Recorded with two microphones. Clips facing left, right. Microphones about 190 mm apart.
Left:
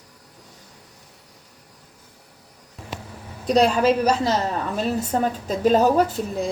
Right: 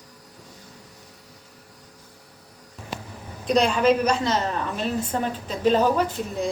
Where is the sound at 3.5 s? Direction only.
40° left (ahead or behind).